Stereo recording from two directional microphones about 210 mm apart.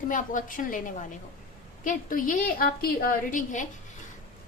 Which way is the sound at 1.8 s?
40° left (ahead or behind).